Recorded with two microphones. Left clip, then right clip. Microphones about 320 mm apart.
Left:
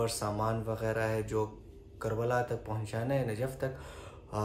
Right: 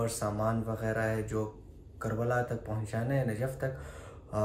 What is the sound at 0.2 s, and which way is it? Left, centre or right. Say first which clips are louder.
Speech: right 1 dB; centre.